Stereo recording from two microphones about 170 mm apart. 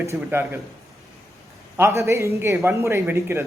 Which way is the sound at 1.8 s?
15° right (ahead or behind).